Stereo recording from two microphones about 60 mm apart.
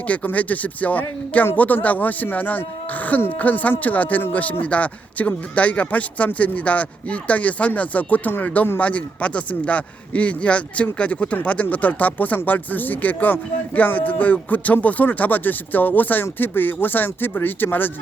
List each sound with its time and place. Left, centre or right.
0.1 s a man's voice: left